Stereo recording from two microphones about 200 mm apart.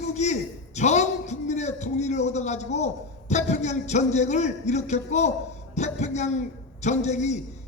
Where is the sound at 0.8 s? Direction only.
35° left (ahead or behind).